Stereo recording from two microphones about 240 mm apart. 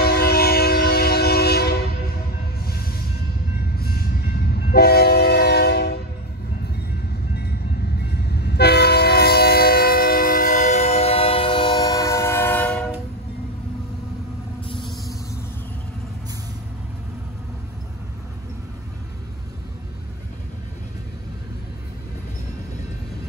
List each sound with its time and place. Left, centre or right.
0.0 s train: left
7.3 s train: left; by 12.8 s centre